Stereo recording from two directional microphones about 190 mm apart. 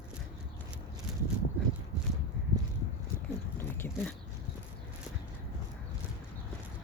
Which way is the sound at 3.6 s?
10° left (ahead or behind).